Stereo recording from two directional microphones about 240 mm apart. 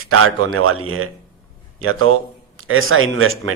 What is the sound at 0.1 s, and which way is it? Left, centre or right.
A man's voice, right.